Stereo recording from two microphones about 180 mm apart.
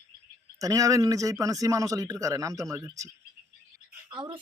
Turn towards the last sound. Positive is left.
turn(degrees=-25)  # may be behind; listen again after turning